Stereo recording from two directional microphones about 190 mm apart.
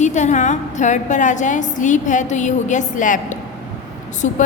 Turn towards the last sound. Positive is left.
turn(degrees=40)  # may be behind; listen again after turning